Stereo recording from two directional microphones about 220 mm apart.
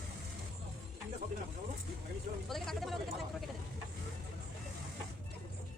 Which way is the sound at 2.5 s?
Centre (ahead or behind).